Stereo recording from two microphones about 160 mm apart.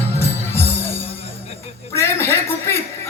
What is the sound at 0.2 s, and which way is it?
Music, 15° left (ahead or behind).